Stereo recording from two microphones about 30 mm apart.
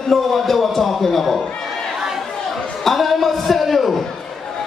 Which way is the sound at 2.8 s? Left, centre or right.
Centre.